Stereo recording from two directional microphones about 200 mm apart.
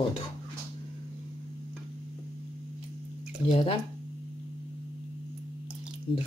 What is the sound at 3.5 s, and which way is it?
Speech, 30° left (ahead or behind).